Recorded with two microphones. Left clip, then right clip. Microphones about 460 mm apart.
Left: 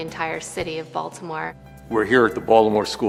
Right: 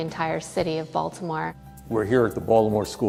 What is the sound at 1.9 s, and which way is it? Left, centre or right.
Speech, right.